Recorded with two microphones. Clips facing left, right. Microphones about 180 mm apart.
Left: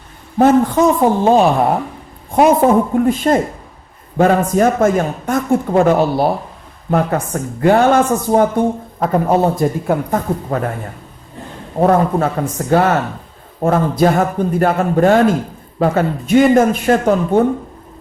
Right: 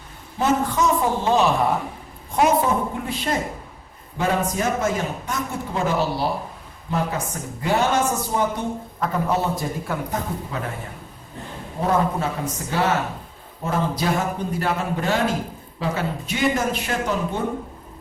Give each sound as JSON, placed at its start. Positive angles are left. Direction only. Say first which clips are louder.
{"t": 0.3, "sound": "speech", "louder": "left 10 dB", "side_deg": 55}
{"t": 11.8, "sound": "speech", "louder": "left 8 dB", "side_deg": 55}